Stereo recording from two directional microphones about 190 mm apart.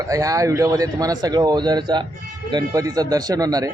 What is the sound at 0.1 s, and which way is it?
Speech, 15° right (ahead or behind).